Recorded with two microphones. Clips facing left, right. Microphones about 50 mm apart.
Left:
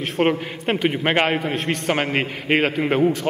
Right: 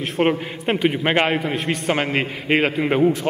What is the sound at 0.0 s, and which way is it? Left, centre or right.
A man's voice, centre.